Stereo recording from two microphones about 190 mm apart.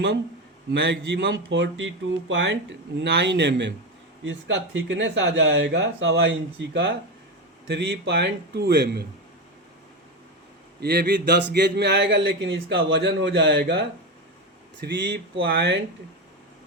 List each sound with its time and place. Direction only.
0.7 s speech: 65° right (ahead or behind)
4.2 s speech: 80° right
6.1 s speech: 60° right (ahead or behind)
10.8 s speech: 55° right (ahead or behind)
14.8 s speech: 70° right (ahead or behind)